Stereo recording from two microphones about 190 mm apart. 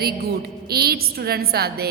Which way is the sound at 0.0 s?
55° right (ahead or behind).